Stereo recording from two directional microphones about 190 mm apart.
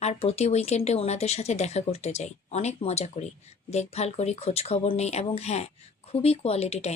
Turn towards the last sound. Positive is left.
turn(degrees=35)  # may be behind; listen again after turning